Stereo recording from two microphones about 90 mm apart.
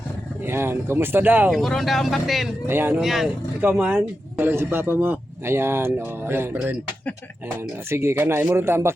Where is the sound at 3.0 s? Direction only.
5° right (ahead or behind).